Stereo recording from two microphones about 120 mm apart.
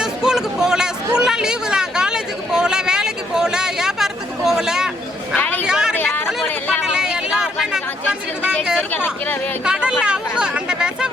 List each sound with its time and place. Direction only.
0.0 s chatter: 5° right (ahead or behind)
8.9 s speech: 15° left (ahead or behind)
9.6 s speech: 5° right (ahead or behind)